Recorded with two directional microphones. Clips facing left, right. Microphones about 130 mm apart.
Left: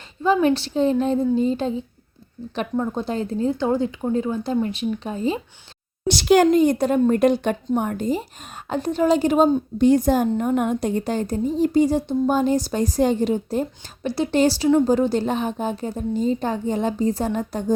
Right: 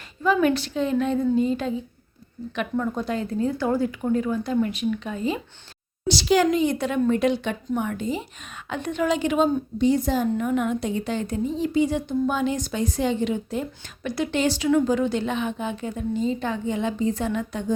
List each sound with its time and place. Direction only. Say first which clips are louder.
0.2 s a woman's voice: left 2 dB; 30° left (ahead or behind)
6.1 s a woman's voice: left 4 dB; 55° left (ahead or behind)
9.7 s speech: left 5 dB; 50° left (ahead or behind)